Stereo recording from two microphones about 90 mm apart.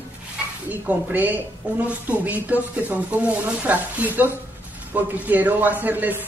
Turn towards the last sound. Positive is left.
turn(degrees=-20)  # may be behind; listen again after turning